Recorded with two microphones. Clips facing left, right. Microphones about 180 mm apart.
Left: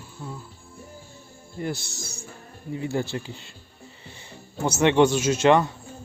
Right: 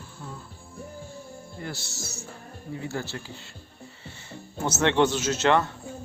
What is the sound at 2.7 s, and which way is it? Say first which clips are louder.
Speech: left 6 dB; 20° left (ahead or behind).